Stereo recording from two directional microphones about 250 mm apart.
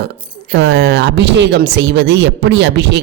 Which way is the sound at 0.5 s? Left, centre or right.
Right.